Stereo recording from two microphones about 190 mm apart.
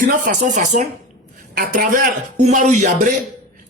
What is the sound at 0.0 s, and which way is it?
Speech, 40° right (ahead or behind).